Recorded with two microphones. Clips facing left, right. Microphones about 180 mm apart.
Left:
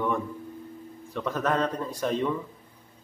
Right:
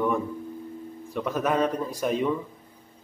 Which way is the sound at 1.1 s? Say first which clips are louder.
Right 2 dB; 10° right (ahead or behind).